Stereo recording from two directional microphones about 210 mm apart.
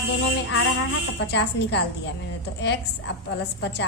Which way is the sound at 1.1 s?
55° left (ahead or behind).